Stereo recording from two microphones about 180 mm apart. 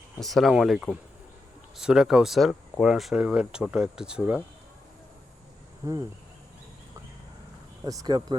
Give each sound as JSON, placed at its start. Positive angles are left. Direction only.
{"t": 0.2, "sound": "speech", "side_deg": 0}
{"t": 5.8, "sound": "speech", "side_deg": -20}
{"t": 7.9, "sound": "speech", "side_deg": -20}